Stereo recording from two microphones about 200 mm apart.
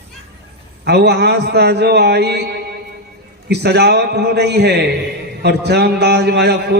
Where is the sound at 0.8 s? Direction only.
55° right (ahead or behind).